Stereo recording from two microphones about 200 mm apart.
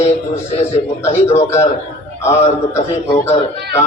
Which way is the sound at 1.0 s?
10° left (ahead or behind).